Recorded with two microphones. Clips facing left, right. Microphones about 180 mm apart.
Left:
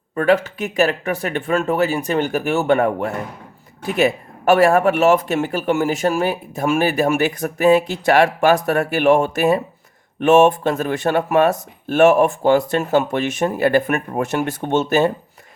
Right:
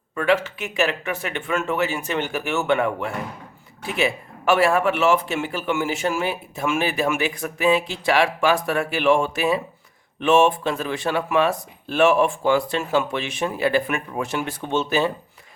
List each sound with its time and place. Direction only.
0.2 s speech: 40° left (ahead or behind)